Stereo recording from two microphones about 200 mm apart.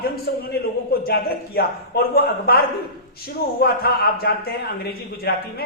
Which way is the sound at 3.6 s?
50° left (ahead or behind).